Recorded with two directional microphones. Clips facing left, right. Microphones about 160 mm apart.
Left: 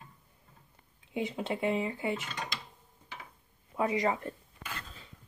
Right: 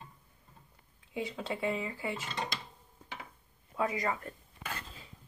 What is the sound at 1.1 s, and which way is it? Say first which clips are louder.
Speech: left 3 dB; 20° left (ahead or behind).